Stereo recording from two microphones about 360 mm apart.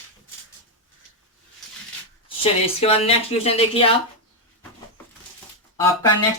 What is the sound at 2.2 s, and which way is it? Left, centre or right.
Speech, centre.